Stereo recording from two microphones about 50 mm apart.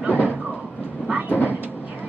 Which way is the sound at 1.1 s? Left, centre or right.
Right.